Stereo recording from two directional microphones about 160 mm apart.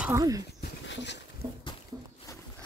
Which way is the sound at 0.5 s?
90° left.